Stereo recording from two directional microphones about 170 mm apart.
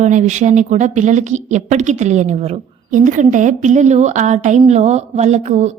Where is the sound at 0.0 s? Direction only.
45° right (ahead or behind).